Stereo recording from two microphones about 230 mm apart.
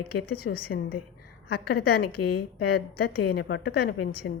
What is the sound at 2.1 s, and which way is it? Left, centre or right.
Speech, left.